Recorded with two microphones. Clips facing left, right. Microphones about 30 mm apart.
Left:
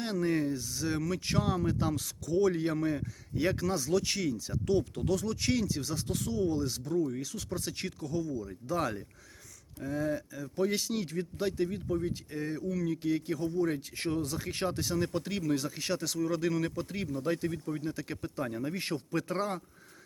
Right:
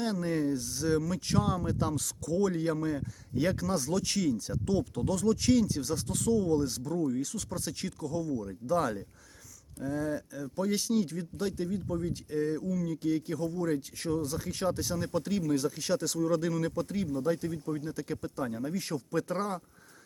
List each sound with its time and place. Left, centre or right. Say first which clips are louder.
0.0 s speech: even; centre
0.9 s speech: right 1 dB; centre; by 14.7 s left
14.7 s speech: right 2 dB; centre
16.0 s speech: right 2 dB; centre
17.2 s speech: left 1 dB; left
17.7 s speech: right 1 dB; centre
18.7 s speech: even; left
19.1 s speech: right 2 dB; centre